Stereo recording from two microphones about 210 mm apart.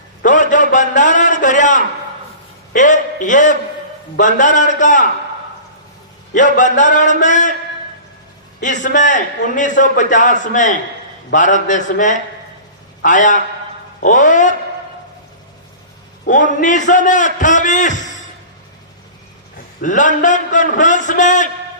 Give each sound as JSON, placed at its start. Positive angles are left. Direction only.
{"t": 0.3, "sound": "a sound", "side_deg": 35}
{"t": 2.7, "sound": "a man's voice", "side_deg": 35}
{"t": 6.3, "sound": "a man's voice", "side_deg": 35}
{"t": 8.6, "sound": "a man's voice", "side_deg": 35}
{"t": 16.6, "sound": "a man's voice", "side_deg": 35}
{"t": 19.8, "sound": "a man's voice", "side_deg": 35}